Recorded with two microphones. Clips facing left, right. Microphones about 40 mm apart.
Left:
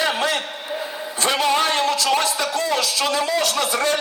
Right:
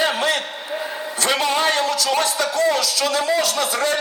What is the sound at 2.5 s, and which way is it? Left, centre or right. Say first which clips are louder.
Speech: right 5 dB; right.